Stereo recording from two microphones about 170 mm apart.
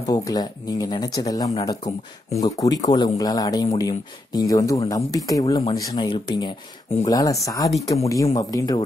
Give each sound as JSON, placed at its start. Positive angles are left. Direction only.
{"t": 0.1, "sound": "speech", "side_deg": 25}